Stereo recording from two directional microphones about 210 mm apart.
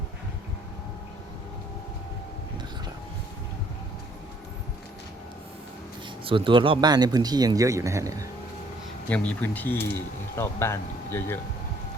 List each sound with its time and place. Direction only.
6.2 s a man's voice: 25° right (ahead or behind)
9.0 s speech: 5° left (ahead or behind)